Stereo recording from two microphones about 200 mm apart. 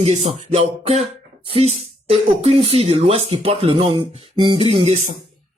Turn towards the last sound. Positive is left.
turn(degrees=-30)  # may be behind; listen again after turning